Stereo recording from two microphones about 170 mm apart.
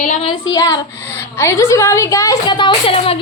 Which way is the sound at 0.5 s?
20° left (ahead or behind).